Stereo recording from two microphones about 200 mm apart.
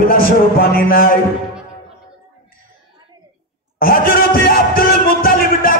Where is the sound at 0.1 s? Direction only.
45° left (ahead or behind).